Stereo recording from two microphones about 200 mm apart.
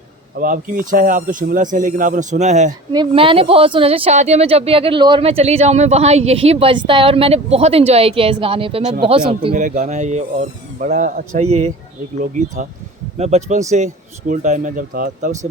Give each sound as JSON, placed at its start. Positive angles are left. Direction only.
{"t": 0.3, "sound": "speech", "side_deg": -45}
{"t": 2.9, "sound": "speech", "side_deg": -25}